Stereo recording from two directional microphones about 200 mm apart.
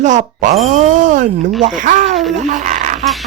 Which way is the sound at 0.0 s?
35° right (ahead or behind).